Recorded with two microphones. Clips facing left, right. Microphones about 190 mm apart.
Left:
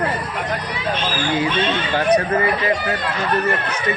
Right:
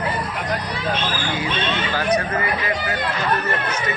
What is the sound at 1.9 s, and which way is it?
Speech, 25° left (ahead or behind).